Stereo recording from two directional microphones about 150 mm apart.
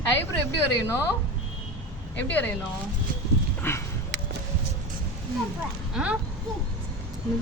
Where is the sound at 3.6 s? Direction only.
15° left (ahead or behind).